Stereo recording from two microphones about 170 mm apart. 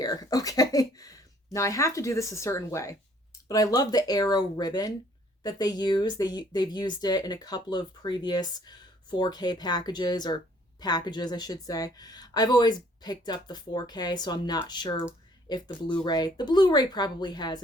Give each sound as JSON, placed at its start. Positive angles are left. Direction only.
{"t": 0.0, "sound": "a woman's voice", "side_deg": 20}